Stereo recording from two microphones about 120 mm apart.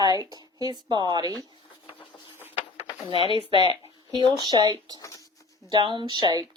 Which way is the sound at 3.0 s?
50° left (ahead or behind).